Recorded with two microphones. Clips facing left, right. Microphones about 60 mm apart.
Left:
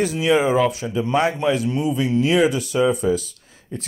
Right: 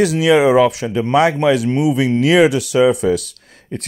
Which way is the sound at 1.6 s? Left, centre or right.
Right.